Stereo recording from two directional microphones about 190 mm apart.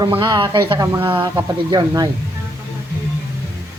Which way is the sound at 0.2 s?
25° right (ahead or behind).